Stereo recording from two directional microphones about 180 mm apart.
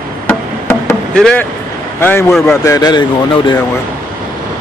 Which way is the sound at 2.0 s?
15° left (ahead or behind).